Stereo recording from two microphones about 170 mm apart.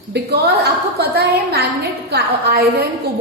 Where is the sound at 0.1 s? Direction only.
75° right (ahead or behind).